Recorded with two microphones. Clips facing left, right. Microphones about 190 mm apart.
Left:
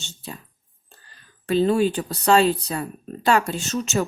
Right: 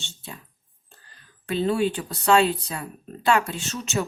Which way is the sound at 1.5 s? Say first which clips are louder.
Left 4 dB; 40° left (ahead or behind).